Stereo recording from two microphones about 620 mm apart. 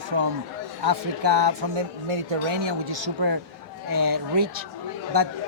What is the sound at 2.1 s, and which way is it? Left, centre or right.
Speech, right.